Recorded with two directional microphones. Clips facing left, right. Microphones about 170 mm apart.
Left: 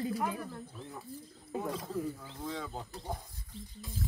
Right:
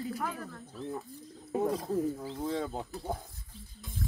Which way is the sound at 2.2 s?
35° right (ahead or behind).